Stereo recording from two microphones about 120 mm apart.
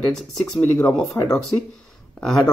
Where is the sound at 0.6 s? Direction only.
10° left (ahead or behind).